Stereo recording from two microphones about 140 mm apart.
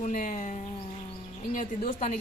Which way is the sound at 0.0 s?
65° left (ahead or behind).